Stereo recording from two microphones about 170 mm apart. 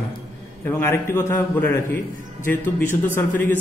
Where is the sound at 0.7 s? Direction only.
15° left (ahead or behind).